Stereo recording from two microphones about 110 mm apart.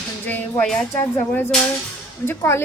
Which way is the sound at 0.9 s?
20° left (ahead or behind).